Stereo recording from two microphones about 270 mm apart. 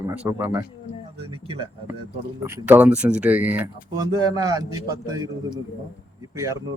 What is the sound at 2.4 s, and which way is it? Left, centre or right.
Speech, centre.